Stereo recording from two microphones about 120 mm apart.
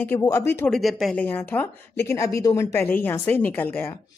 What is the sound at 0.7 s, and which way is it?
Speech, centre (ahead or behind).